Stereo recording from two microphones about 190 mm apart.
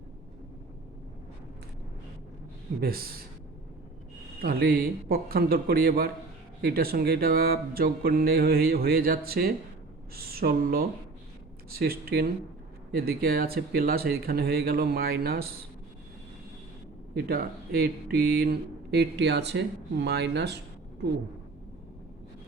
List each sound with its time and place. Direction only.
2.8 s speech: 50° right (ahead or behind)
4.4 s speech: 55° right (ahead or behind)
17.2 s speech: 55° right (ahead or behind)